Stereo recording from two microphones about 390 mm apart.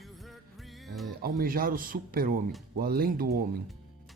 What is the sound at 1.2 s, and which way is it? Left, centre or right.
Speech, right.